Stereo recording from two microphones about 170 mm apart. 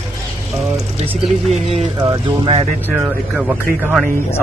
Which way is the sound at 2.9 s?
10° right (ahead or behind).